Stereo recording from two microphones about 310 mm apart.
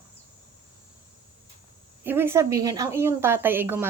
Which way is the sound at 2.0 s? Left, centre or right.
Centre.